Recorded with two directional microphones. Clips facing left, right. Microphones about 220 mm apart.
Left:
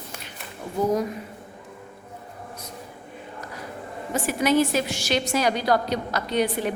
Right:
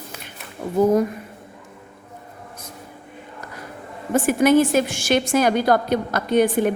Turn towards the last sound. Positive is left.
turn(degrees=-50)  # may be behind; listen again after turning